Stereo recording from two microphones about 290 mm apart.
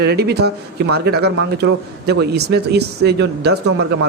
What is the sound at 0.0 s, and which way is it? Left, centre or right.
Speech, right.